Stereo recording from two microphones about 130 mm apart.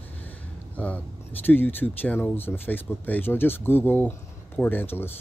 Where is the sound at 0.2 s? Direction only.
10° left (ahead or behind).